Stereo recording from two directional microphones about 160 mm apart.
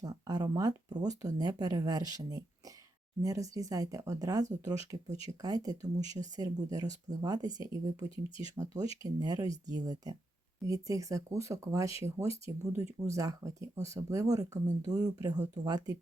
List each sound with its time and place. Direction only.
0.0 s speech: 25° right (ahead or behind)
8.1 s speech: 35° left (ahead or behind)
8.5 s speech: 20° right (ahead or behind)